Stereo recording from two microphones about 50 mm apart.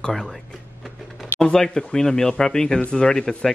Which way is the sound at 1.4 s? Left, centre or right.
Centre.